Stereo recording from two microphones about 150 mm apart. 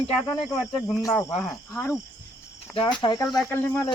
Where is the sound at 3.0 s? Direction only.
30° left (ahead or behind).